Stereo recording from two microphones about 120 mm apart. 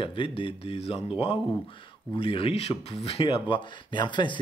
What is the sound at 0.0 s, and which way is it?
Speech, 45° left (ahead or behind).